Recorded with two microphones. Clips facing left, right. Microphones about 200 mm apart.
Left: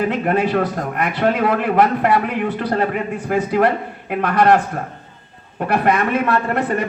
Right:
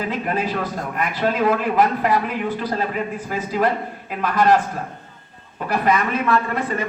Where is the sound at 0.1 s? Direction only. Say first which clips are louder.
Left 6 dB; 70° left (ahead or behind).